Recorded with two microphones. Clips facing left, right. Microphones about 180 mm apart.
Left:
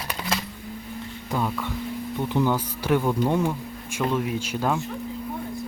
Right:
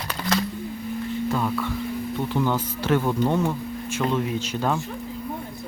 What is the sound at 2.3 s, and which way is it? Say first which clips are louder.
Speech: left 2 dB; 10° left (ahead or behind).